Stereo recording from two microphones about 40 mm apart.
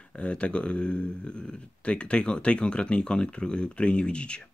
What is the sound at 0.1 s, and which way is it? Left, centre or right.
Speech, left.